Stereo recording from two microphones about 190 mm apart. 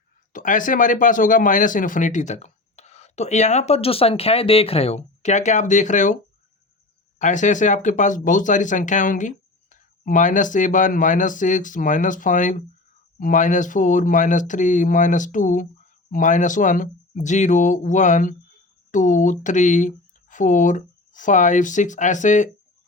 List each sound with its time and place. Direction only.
0.3 s speech: 45° left (ahead or behind)
7.2 s speech: 40° left (ahead or behind)